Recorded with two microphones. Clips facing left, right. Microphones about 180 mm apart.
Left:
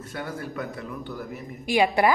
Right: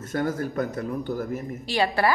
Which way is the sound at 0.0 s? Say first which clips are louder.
Right 7 dB; 45° right (ahead or behind).